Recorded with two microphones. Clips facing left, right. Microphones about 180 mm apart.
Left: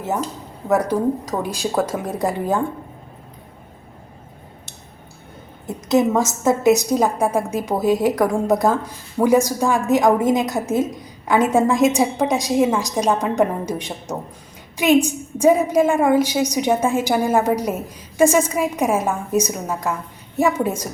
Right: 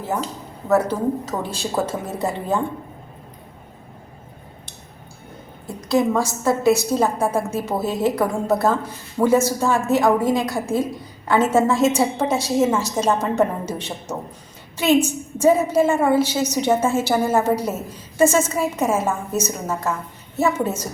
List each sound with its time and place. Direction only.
0.7 s a woman's voice: 15° left (ahead or behind)
5.6 s a woman's voice: 20° left (ahead or behind)